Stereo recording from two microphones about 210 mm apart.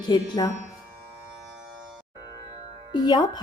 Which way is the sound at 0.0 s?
20° left (ahead or behind).